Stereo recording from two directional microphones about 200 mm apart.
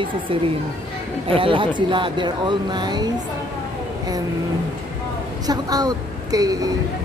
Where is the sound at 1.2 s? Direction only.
25° right (ahead or behind).